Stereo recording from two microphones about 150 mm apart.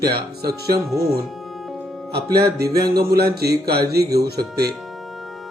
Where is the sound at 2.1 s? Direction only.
90° right.